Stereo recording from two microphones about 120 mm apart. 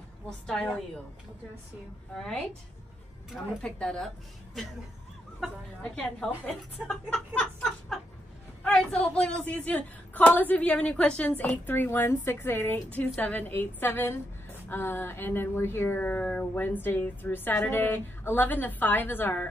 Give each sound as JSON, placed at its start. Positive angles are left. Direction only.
{"t": 0.5, "sound": "speech", "side_deg": 5}
{"t": 2.1, "sound": "speech", "side_deg": 5}
{"t": 3.6, "sound": "a woman's voice", "side_deg": 5}
{"t": 5.9, "sound": "a woman's voice", "side_deg": 5}